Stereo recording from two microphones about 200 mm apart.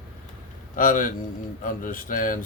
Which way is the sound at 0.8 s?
40° left (ahead or behind).